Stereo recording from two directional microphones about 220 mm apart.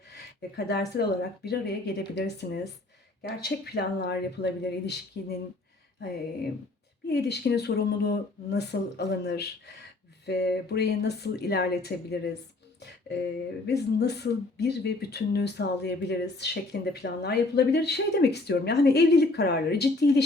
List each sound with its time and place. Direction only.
0.1 s speech: 50° left (ahead or behind)
7.1 s speech: 50° left (ahead or behind)
13.7 s speech: 50° left (ahead or behind)